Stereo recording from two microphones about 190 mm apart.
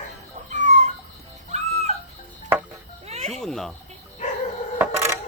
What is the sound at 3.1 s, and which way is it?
Insect, 35° right (ahead or behind).